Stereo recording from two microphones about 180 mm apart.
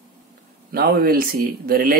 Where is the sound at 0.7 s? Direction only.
55° right (ahead or behind).